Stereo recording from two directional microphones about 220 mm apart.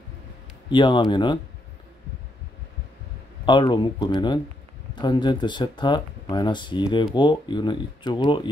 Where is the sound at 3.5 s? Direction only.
20° left (ahead or behind).